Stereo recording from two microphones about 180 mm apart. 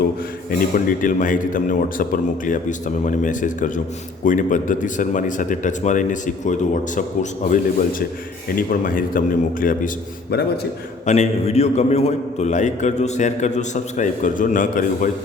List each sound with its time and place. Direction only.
0.9 s speech: 50° left (ahead or behind)
11.0 s a man's voice: 40° left (ahead or behind)